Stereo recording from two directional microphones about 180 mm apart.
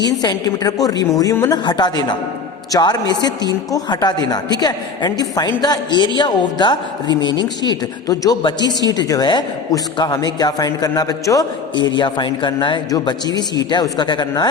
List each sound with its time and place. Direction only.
0.2 s a man's voice: 20° left (ahead or behind)